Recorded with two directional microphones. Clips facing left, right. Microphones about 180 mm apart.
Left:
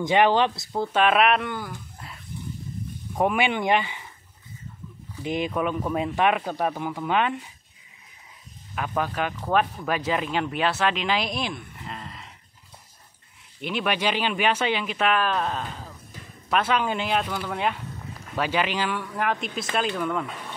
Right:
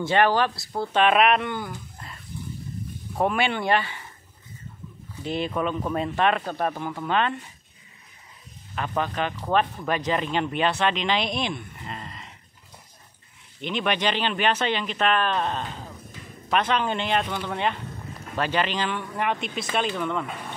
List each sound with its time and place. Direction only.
0.0 s speech: 15° left (ahead or behind)
0.9 s speech: centre (ahead or behind)
2.0 s wild animals: 10° left (ahead or behind)
3.2 s speech: 15° left (ahead or behind)
5.2 s speech: 15° left (ahead or behind)
8.7 s speech: 5° left (ahead or behind)
13.6 s speech: 5° left (ahead or behind)